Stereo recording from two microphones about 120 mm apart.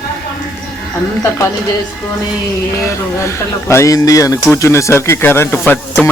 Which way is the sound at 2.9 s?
25° left (ahead or behind).